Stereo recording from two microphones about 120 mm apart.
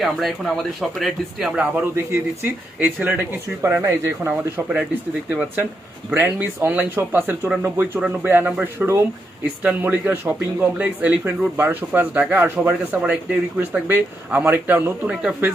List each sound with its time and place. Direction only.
0.0 s speech: centre (ahead or behind)
2.0 s speech: 20° right (ahead or behind)
2.7 s a man's voice: 10° right (ahead or behind)
3.6 s a man's voice: 20° right (ahead or behind)
15.1 s speech: 5° right (ahead or behind)